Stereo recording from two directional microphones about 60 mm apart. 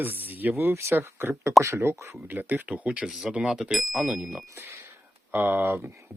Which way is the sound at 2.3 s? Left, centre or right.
Right.